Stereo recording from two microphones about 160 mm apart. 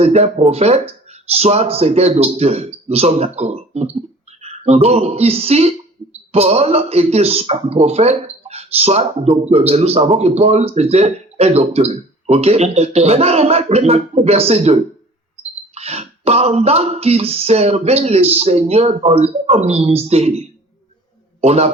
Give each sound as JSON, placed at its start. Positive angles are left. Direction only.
{"t": 0.0, "sound": "a man's voice", "side_deg": -40}